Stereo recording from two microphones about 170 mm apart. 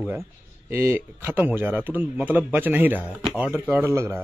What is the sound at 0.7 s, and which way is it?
A man's voice, 15° right (ahead or behind).